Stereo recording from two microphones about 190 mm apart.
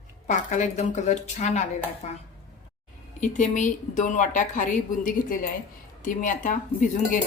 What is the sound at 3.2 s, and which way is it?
A woman's voice, 40° left (ahead or behind).